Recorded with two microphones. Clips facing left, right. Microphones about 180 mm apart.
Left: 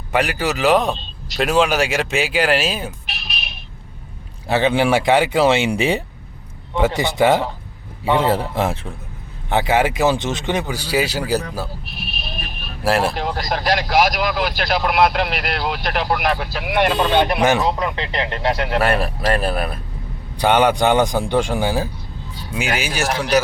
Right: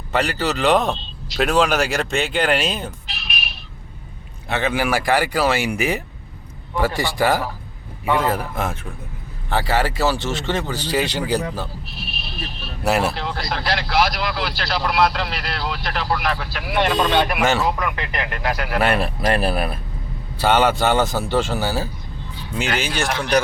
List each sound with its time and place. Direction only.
0.1 s speech: 10° left (ahead or behind)
4.4 s speech: 30° left (ahead or behind)
9.5 s speech: 20° left (ahead or behind)
12.2 s vehicle: 50° left (ahead or behind)
12.8 s speech: centre (ahead or behind)
13.1 s speech: 45° left (ahead or behind)
16.0 s speech: 20° left (ahead or behind)
17.7 s speech: 25° left (ahead or behind)
18.8 s speech: centre (ahead or behind)
20.4 s speech: 15° left (ahead or behind)